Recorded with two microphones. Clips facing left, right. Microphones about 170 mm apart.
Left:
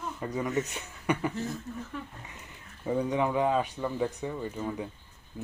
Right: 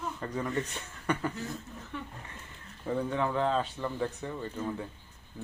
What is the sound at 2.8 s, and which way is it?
Speech, 15° left (ahead or behind).